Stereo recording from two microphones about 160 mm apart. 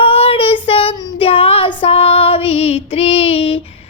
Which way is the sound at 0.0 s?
35° left (ahead or behind).